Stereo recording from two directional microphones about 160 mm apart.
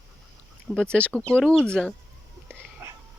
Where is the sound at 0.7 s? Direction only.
5° left (ahead or behind).